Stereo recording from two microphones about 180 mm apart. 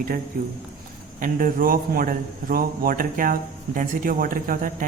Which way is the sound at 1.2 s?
50° right (ahead or behind).